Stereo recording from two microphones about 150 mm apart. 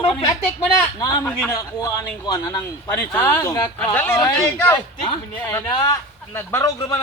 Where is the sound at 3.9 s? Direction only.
10° left (ahead or behind).